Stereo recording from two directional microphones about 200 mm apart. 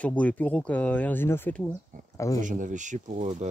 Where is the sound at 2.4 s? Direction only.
40° right (ahead or behind).